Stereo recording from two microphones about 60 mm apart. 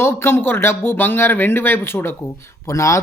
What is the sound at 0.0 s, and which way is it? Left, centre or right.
Speech, left.